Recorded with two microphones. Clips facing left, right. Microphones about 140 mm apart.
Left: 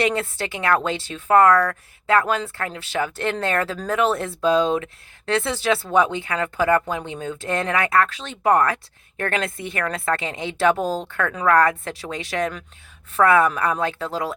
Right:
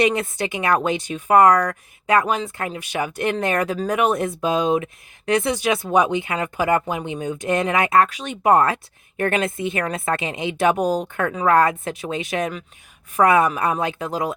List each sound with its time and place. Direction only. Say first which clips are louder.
0.0 s speech: right 3 dB; 15° right (ahead or behind)